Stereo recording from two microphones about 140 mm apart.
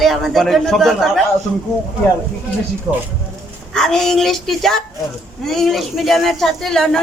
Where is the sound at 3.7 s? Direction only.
5° left (ahead or behind).